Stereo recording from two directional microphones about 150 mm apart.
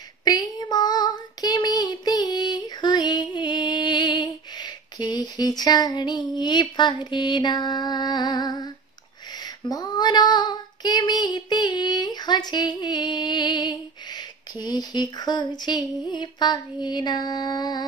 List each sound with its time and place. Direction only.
0.2 s child singing: 30° left (ahead or behind)
3.3 s female singing: 30° left (ahead or behind)
16.1 s a sound: 30° left (ahead or behind)
16.8 s music: 30° left (ahead or behind)